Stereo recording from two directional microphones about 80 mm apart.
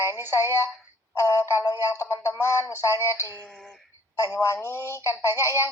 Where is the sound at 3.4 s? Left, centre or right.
Centre.